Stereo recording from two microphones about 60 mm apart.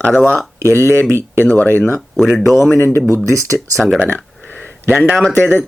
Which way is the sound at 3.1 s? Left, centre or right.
Right.